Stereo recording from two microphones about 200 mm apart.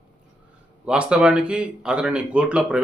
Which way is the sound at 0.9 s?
5° right (ahead or behind).